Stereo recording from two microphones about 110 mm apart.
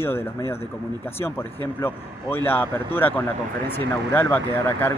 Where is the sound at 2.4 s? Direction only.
20° left (ahead or behind).